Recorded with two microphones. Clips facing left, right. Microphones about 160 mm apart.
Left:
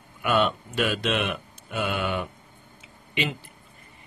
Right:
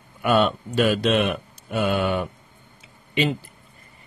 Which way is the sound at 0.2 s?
40° right (ahead or behind).